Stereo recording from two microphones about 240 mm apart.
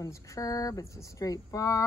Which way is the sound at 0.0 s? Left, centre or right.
Centre.